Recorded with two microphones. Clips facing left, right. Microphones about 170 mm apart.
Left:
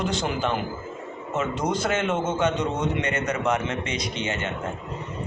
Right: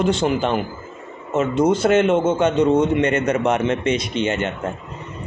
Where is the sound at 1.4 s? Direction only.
25° right (ahead or behind).